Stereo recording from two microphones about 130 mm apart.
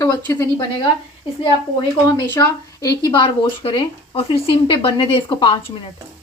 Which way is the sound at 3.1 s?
40° left (ahead or behind).